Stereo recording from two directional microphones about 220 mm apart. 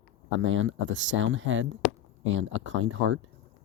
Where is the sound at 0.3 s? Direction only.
60° right (ahead or behind).